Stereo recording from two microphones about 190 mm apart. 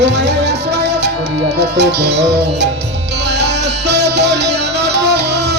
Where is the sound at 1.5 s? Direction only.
65° right (ahead or behind).